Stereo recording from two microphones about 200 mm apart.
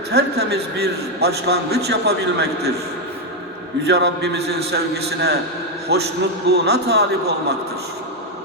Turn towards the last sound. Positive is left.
turn(degrees=-55)  # may be behind; listen again after turning